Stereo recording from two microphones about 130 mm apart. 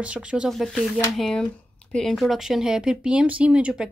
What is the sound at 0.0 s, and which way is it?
Speech, 10° right (ahead or behind).